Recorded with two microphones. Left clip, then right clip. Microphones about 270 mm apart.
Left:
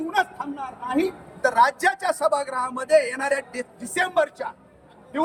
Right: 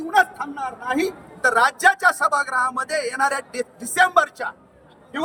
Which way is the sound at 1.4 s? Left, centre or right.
Centre.